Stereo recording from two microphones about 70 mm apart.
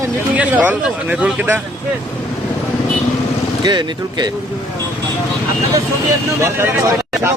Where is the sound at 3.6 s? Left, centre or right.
Right.